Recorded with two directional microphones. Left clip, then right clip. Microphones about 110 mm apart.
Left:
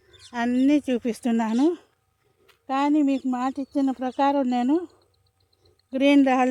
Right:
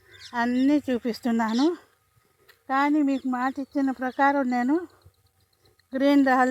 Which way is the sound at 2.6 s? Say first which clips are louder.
Left 1 dB; 25° left (ahead or behind).